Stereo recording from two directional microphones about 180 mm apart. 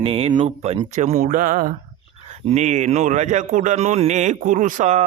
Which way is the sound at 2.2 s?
35° right (ahead or behind).